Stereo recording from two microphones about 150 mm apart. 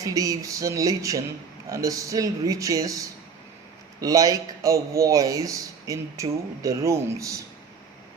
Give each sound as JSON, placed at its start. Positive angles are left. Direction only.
{"t": 0.0, "sound": "speech", "side_deg": -20}